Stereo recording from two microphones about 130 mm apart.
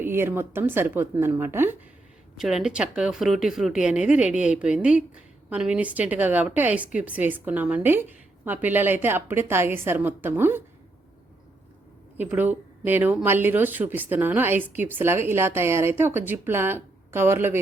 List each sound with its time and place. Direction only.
0.0 s speech: 15° right (ahead or behind)
2.4 s speech: 5° right (ahead or behind)
12.1 s speech: 15° right (ahead or behind)